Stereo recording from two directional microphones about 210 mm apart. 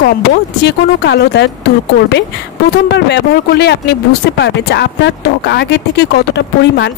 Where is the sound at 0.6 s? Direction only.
50° left (ahead or behind).